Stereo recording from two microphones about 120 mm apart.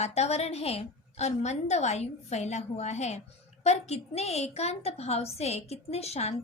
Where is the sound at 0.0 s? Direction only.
65° left (ahead or behind).